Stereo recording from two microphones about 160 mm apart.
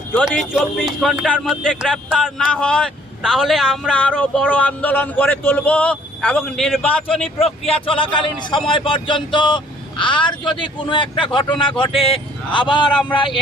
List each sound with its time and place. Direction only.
0.3 s speech: 5° right (ahead or behind)
7.4 s speech: 35° left (ahead or behind)